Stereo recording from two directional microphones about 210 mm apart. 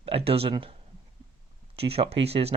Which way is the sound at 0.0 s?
25° right (ahead or behind).